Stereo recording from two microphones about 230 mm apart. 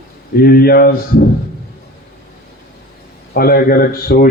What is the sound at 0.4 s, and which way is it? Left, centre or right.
Speech, left.